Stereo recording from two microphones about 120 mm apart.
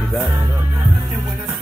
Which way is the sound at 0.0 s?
5° right (ahead or behind).